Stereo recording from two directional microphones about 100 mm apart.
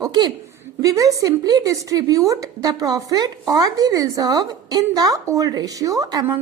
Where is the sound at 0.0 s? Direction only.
45° right (ahead or behind).